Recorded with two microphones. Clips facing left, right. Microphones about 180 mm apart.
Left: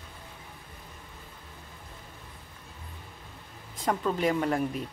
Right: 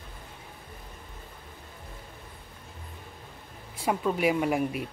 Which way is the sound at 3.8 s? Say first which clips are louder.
Right 1 dB; 10° right (ahead or behind).